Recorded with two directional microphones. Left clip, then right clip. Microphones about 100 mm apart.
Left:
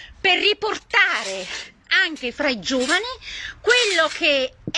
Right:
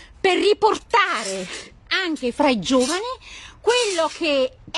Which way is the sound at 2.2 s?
45° right (ahead or behind).